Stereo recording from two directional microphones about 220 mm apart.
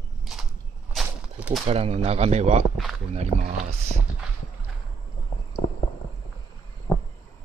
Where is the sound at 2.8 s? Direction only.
Centre (ahead or behind).